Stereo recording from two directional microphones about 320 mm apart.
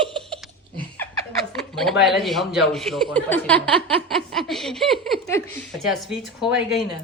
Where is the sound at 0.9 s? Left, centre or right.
Centre.